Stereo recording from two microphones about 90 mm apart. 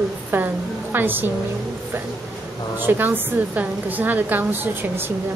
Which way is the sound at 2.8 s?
25° right (ahead or behind).